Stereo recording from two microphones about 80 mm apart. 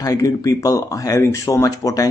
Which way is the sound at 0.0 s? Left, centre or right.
Left.